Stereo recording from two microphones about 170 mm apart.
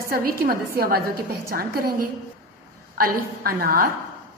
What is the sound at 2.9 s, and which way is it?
Speech, 60° right (ahead or behind).